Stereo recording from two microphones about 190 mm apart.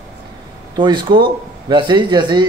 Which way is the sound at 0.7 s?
25° right (ahead or behind).